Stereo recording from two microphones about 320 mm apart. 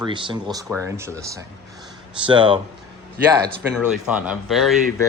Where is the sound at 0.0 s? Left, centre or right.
Centre.